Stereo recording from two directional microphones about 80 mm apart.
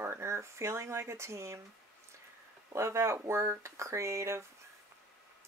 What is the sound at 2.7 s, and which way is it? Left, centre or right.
Speech, right.